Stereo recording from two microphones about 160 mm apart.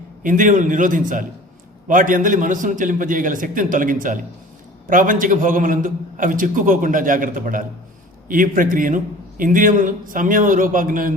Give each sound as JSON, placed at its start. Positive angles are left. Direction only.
{"t": 0.2, "sound": "a man's voice", "side_deg": -55}